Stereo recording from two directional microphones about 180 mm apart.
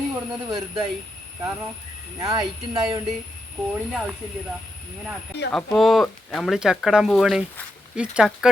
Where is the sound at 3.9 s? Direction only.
5° right (ahead or behind).